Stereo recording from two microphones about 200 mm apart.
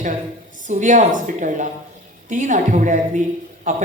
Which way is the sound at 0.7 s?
40° right (ahead or behind).